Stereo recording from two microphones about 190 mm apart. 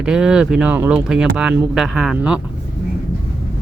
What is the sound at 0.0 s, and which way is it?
Speech, 5° right (ahead or behind).